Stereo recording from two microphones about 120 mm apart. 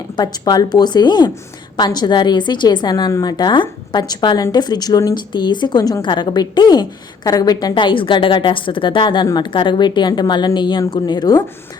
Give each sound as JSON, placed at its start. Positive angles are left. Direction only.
{"t": 0.2, "sound": "a woman's voice", "side_deg": 35}